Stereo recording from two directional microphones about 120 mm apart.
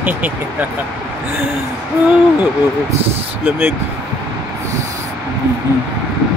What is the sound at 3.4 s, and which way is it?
Speech, 20° right (ahead or behind).